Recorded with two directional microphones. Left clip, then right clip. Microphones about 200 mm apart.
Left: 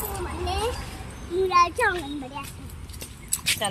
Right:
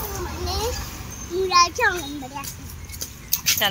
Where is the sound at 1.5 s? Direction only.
Centre (ahead or behind).